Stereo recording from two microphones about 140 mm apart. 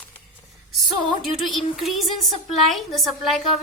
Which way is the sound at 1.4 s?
Centre (ahead or behind).